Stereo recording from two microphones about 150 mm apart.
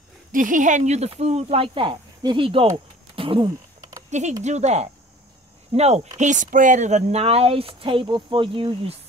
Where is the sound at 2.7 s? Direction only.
35° right (ahead or behind).